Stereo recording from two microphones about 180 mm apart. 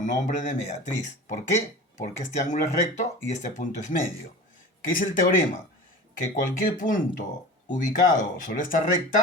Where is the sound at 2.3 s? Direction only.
40° left (ahead or behind).